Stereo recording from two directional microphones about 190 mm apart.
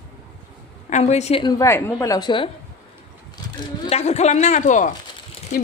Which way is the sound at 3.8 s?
35° left (ahead or behind).